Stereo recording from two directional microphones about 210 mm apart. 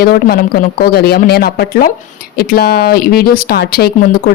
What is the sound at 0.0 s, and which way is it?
Speech, 45° left (ahead or behind).